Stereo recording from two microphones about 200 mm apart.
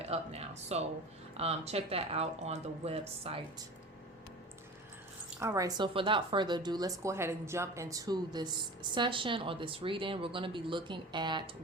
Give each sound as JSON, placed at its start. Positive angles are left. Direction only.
{"t": 0.0, "sound": "speech", "side_deg": -30}
{"t": 5.4, "sound": "a woman's voice", "side_deg": -15}